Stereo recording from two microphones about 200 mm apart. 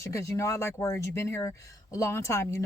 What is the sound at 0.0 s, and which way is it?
Speech, 15° left (ahead or behind).